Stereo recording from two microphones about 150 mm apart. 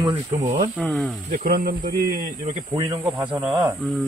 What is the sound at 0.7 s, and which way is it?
Speech, centre (ahead or behind).